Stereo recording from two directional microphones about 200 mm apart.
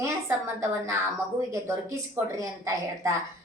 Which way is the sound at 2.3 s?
15° right (ahead or behind).